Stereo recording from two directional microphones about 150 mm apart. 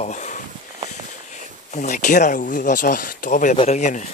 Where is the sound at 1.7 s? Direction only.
55° left (ahead or behind).